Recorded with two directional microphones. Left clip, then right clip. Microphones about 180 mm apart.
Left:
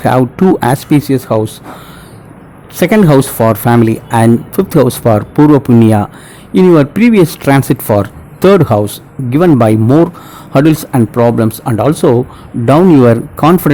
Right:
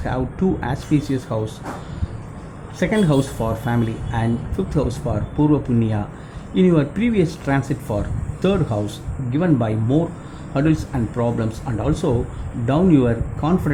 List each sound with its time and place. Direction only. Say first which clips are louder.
0.0 s speech: left 14 dB; 60° left (ahead or behind)
2.7 s speech: left 11 dB; 60° left (ahead or behind)